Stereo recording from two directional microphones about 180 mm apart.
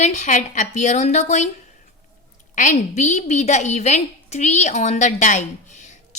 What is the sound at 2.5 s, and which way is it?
A woman's voice, 40° left (ahead or behind).